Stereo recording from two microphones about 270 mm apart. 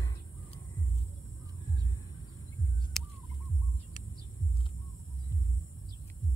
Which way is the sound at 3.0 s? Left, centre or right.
Centre.